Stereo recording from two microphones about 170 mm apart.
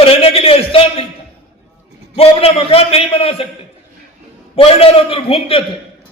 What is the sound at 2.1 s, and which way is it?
Mantra, 35° left (ahead or behind).